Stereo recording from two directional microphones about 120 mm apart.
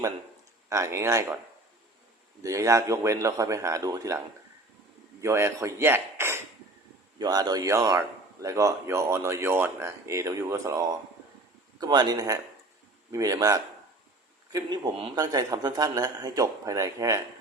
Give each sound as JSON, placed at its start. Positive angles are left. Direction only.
{"t": 0.7, "sound": "speech", "side_deg": -25}
{"t": 2.4, "sound": "speech", "side_deg": -25}
{"t": 5.2, "sound": "speech", "side_deg": -25}
{"t": 7.2, "sound": "a man's voice", "side_deg": -35}